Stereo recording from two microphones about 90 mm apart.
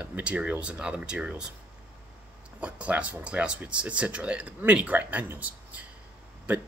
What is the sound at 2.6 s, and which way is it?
Speech, 15° right (ahead or behind).